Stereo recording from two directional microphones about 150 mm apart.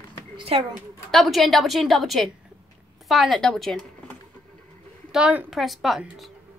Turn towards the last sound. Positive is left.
turn(degrees=0)  # may be behind; listen again after turning